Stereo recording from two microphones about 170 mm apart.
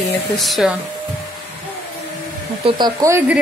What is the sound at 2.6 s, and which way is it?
Speech, 25° right (ahead or behind).